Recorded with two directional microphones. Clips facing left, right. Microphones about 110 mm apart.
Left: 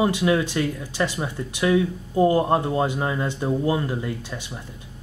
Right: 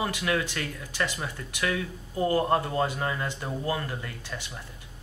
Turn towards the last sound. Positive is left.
turn(degrees=20)  # may be behind; listen again after turning